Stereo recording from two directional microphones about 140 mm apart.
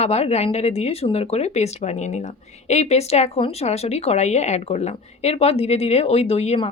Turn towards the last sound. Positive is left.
turn(degrees=45)  # may be behind; listen again after turning